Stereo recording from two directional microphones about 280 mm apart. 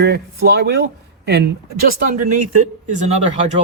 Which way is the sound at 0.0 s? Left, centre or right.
Right.